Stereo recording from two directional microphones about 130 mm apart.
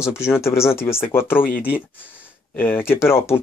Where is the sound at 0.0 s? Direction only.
20° left (ahead or behind).